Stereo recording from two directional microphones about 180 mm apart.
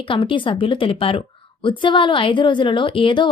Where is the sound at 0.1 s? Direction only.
30° left (ahead or behind).